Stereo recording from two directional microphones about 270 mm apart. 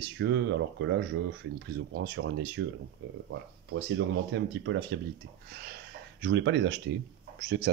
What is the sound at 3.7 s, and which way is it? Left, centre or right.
Speech, right.